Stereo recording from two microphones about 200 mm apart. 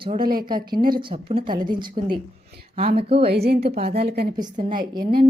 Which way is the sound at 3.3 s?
55° right (ahead or behind).